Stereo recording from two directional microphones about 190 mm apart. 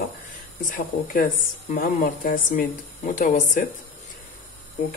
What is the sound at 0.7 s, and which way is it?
Speech, 45° left (ahead or behind).